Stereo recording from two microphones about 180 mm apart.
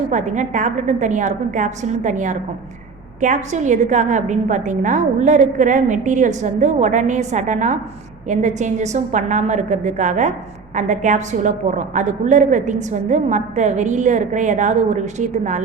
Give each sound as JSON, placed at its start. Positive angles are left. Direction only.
{"t": 0.1, "sound": "a woman's voice", "side_deg": -40}